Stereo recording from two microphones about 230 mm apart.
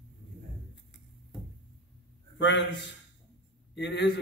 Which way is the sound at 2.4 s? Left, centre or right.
Left.